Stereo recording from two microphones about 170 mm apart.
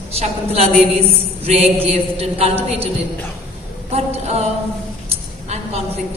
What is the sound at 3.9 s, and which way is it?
Speech, 40° right (ahead or behind).